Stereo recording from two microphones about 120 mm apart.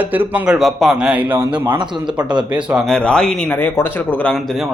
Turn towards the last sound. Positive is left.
turn(degrees=15)  # may be behind; listen again after turning